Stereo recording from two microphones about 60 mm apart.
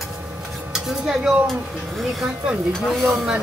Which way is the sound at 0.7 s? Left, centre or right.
Centre.